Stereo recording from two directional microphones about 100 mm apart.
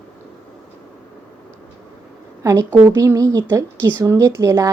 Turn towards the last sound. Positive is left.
turn(degrees=-30)  # may be behind; listen again after turning